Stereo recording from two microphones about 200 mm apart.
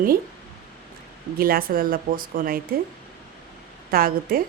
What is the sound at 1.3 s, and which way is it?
Speech, 45° right (ahead or behind).